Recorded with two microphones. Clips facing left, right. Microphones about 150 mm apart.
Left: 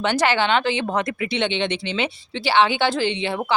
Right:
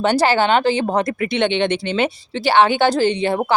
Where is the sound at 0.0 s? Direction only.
35° right (ahead or behind).